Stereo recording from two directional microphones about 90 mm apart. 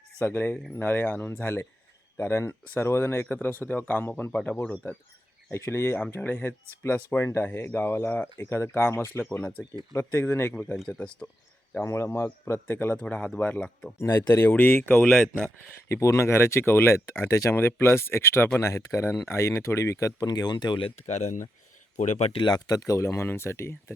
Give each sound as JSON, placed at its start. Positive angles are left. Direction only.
{"t": 0.2, "sound": "speech", "side_deg": 25}
{"t": 9.4, "sound": "speech", "side_deg": 15}
{"t": 9.9, "sound": "speech", "side_deg": 30}
{"t": 11.8, "sound": "speech", "side_deg": 30}
{"t": 14.0, "sound": "speech", "side_deg": 40}
{"t": 14.3, "sound": "speech", "side_deg": 20}
{"t": 15.9, "sound": "speech", "side_deg": 35}
{"t": 22.3, "sound": "speech", "side_deg": 55}